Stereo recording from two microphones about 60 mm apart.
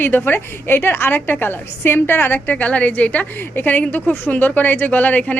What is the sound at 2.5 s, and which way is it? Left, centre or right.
A woman's voice, left.